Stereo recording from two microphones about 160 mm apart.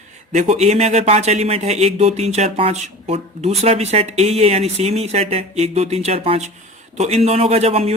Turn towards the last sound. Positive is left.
turn(degrees=-40)  # may be behind; listen again after turning